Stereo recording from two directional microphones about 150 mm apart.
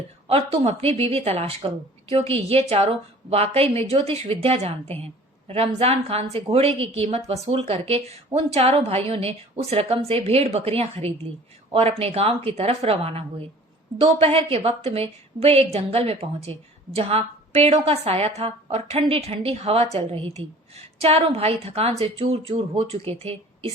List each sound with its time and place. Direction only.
0.3 s a woman's voice: 40° right (ahead or behind)